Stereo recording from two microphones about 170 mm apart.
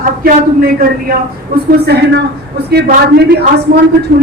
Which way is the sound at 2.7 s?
70° right (ahead or behind).